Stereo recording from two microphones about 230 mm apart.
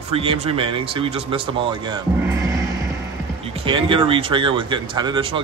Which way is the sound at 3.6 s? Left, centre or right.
Right.